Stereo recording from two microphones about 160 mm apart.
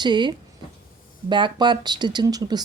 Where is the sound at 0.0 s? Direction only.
30° right (ahead or behind).